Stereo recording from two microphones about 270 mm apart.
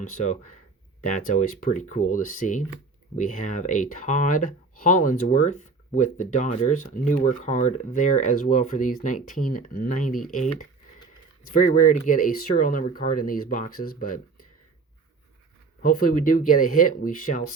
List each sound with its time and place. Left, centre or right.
0.1 s speech: left
15.8 s speech: left